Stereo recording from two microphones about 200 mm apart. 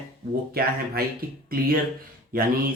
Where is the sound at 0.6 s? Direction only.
50° right (ahead or behind).